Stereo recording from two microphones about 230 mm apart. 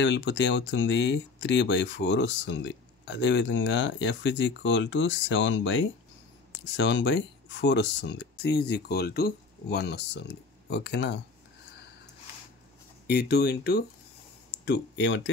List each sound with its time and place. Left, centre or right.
0.0 s speech: left
13.0 s speech: left